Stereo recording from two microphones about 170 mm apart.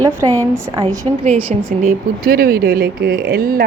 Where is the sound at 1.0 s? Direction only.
30° right (ahead or behind).